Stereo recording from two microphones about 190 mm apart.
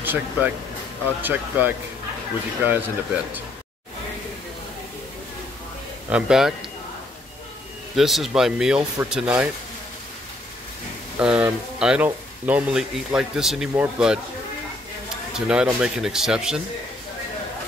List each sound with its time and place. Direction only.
0.0 s speech: 10° right (ahead or behind)
6.0 s speech: 5° right (ahead or behind)
7.9 s speech: centre (ahead or behind)
11.1 s speech: 5° right (ahead or behind)
15.3 s speech: 5° right (ahead or behind)